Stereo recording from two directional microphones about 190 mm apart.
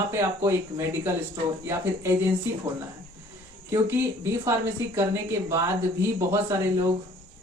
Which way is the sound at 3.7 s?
15° right (ahead or behind).